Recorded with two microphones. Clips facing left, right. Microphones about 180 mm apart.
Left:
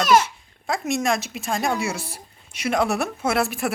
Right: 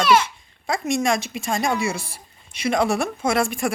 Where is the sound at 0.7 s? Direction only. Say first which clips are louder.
Right 1 dB; centre (ahead or behind).